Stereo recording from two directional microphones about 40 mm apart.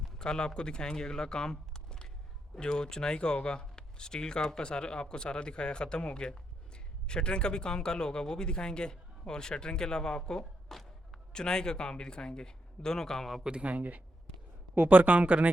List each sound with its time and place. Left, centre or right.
0.2 s speech: left
2.6 s speech: centre
10.7 s a sound: centre
11.3 s speech: centre
13.4 s speech: right
13.7 s speech: right